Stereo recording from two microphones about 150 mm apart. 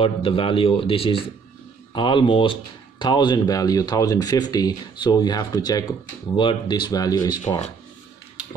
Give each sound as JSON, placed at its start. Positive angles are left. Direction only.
{"t": 0.0, "sound": "speech", "side_deg": 35}